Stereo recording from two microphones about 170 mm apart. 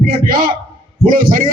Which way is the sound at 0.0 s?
60° right (ahead or behind).